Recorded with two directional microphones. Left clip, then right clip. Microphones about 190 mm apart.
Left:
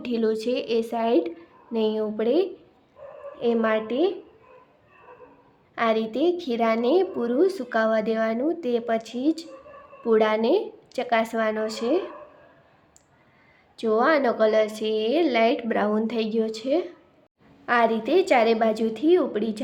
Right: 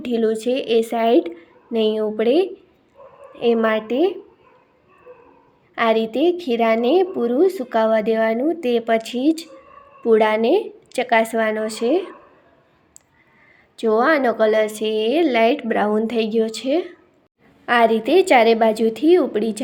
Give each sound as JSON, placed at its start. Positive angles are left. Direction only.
{"t": 0.0, "sound": "a woman's voice", "side_deg": -10}
{"t": 5.7, "sound": "a woman's voice", "side_deg": -15}
{"t": 13.7, "sound": "a woman's voice", "side_deg": -15}